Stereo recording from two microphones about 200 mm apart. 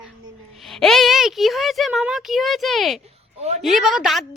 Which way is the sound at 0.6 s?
Centre (ahead or behind).